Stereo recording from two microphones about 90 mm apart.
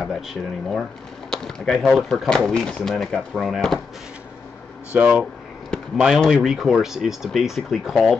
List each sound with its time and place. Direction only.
0.0 s speech: centre (ahead or behind)
4.9 s speech: 15° right (ahead or behind)
5.9 s speech: 5° right (ahead or behind)